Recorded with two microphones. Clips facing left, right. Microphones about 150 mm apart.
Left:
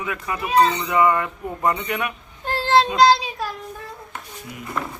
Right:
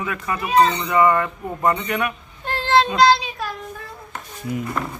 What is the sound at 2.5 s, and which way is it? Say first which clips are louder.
Child singing: even; 35° left (ahead or behind).